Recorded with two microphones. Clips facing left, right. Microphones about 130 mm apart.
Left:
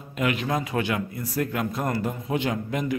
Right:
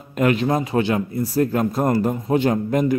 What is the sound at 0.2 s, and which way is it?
Speech, 40° right (ahead or behind).